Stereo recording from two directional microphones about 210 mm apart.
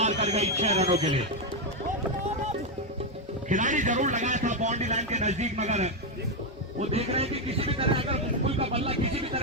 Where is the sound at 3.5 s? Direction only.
35° right (ahead or behind).